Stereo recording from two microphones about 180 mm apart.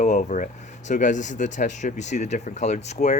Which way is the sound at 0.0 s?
40° left (ahead or behind).